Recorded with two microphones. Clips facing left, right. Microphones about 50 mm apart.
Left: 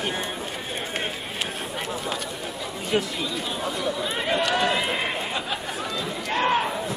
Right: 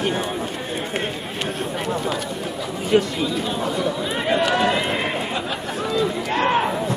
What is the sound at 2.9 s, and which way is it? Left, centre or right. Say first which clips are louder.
Chatter: right 7 dB; centre.